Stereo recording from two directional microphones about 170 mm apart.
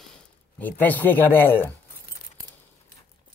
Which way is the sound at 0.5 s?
10° left (ahead or behind).